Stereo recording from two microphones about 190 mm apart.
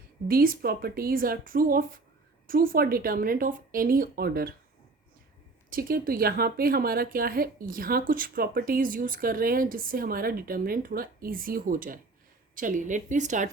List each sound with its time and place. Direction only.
0.3 s a woman's voice: 50° right (ahead or behind)
5.7 s a woman's voice: 50° right (ahead or behind)